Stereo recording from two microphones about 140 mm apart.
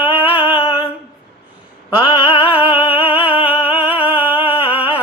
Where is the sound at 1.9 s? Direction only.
35° left (ahead or behind).